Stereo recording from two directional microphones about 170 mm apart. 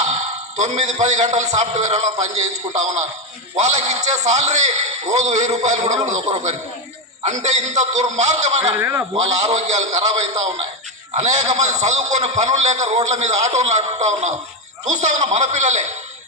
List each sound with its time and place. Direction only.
0.0 s a man's voice: 45° right (ahead or behind)
8.7 s a man's voice: 10° right (ahead or behind)
9.1 s a man's voice: 40° right (ahead or behind)